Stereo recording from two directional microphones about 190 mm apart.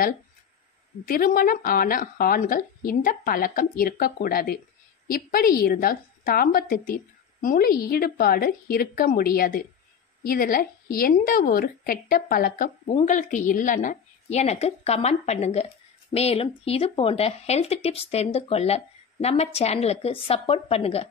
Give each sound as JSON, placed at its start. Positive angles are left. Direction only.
{"t": 1.0, "sound": "a woman's voice", "side_deg": 50}